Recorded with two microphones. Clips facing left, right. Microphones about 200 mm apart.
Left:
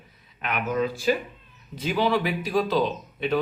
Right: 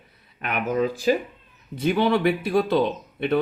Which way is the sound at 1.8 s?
55° right (ahead or behind).